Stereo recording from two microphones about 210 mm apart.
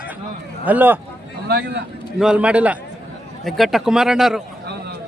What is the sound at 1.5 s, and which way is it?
Speech, 50° right (ahead or behind).